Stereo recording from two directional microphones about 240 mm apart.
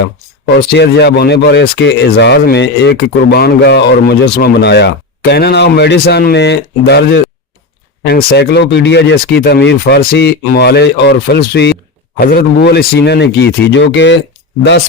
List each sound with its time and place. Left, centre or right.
0.7 s speech: left